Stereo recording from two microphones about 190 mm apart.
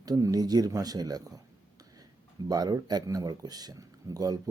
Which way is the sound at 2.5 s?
20° right (ahead or behind).